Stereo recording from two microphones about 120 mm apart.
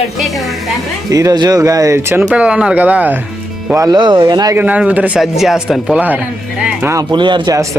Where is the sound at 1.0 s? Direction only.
30° right (ahead or behind).